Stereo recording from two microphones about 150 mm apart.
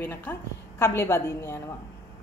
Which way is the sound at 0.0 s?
15° left (ahead or behind).